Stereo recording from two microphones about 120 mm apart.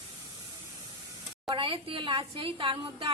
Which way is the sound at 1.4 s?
45° right (ahead or behind).